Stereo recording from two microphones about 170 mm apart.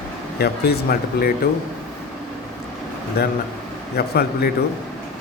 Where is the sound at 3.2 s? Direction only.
70° left (ahead or behind).